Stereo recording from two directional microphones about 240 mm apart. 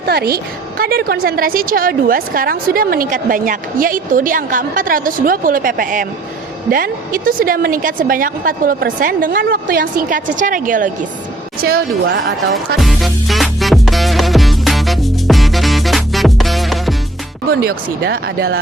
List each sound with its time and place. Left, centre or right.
0.0 s a woman's voice: right
12.8 s music: centre
17.5 s a woman's voice: right